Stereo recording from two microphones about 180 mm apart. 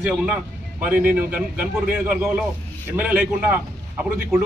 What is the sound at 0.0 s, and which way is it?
A man's voice, 5° right (ahead or behind).